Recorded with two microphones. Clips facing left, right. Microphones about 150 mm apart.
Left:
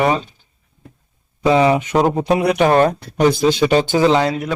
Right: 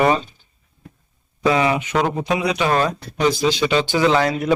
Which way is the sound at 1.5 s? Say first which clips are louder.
Left 4 dB; 30° left (ahead or behind).